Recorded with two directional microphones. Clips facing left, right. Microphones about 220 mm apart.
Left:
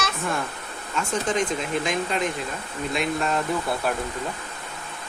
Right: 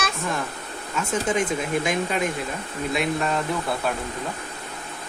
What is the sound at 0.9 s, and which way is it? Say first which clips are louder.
Speech: right 1 dB; 5° right (ahead or behind).